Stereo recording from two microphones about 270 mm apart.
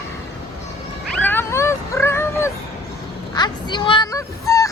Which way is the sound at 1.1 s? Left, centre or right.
Centre.